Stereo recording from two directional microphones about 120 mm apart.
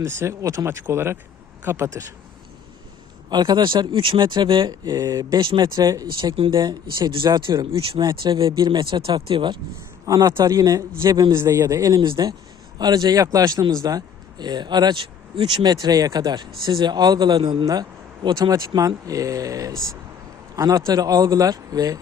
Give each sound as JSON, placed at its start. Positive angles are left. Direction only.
{"t": 0.0, "sound": "speech", "side_deg": -25}
{"t": 3.2, "sound": "speech", "side_deg": -35}
{"t": 5.4, "sound": "speech", "side_deg": -40}
{"t": 6.1, "sound": "speech", "side_deg": -45}
{"t": 10.1, "sound": "speech", "side_deg": -30}